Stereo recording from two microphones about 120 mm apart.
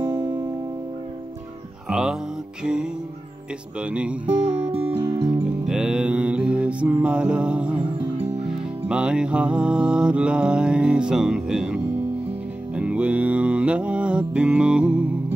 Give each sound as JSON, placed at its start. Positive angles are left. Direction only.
{"t": 0.0, "sound": "music", "side_deg": -25}
{"t": 1.9, "sound": "music", "side_deg": -5}
{"t": 4.3, "sound": "music", "side_deg": -50}
{"t": 5.7, "sound": "mantra", "side_deg": -5}
{"t": 8.8, "sound": "music", "side_deg": -10}